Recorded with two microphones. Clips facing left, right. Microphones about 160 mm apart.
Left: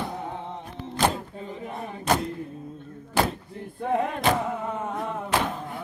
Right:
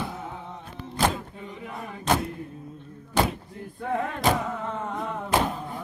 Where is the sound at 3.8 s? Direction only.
25° left (ahead or behind).